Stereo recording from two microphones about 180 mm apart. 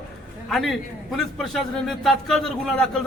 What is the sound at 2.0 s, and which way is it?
Speech, centre (ahead or behind).